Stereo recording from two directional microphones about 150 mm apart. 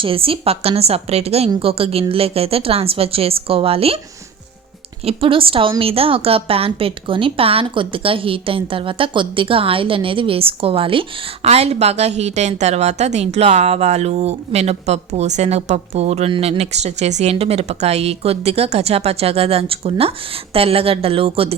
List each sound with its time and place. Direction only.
0.0 s a woman's voice: 35° right (ahead or behind)
5.0 s a woman's voice: 35° right (ahead or behind)